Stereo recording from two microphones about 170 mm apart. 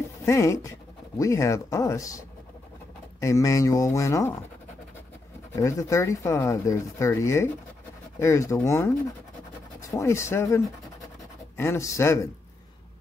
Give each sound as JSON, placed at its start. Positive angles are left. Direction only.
{"t": 0.2, "sound": "speech", "side_deg": 15}
{"t": 5.6, "sound": "speech", "side_deg": 20}